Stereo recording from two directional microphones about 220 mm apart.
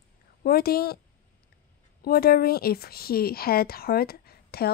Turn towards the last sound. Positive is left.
turn(degrees=45)  # may be behind; listen again after turning